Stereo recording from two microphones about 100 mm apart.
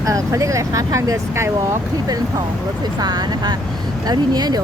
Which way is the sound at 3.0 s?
45° right (ahead or behind).